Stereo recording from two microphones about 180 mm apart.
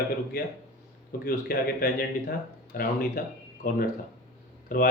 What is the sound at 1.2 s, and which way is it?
Speech, 55° left (ahead or behind).